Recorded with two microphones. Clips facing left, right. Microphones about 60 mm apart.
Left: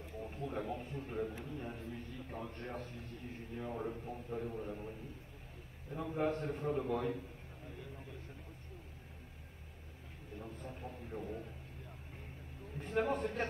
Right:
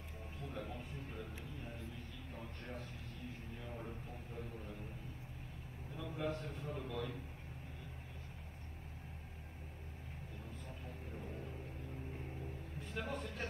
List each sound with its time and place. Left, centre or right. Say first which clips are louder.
0.2 s a sound: left 6 dB; left
1.4 s a man's voice: left 5 dB; left
5.9 s a man's voice: left 6 dB; left
10.4 s speech: left 8 dB; left
12.7 s a man's voice: left 10 dB; left